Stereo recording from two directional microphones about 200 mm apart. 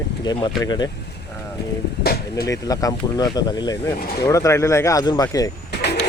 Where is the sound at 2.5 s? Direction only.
20° left (ahead or behind).